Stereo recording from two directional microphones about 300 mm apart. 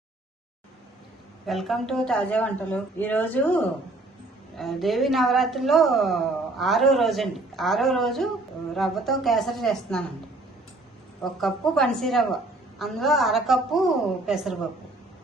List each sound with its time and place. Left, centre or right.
1.5 s a woman's voice: centre
11.2 s a woman's voice: centre